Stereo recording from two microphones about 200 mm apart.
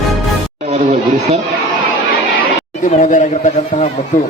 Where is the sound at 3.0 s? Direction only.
40° left (ahead or behind).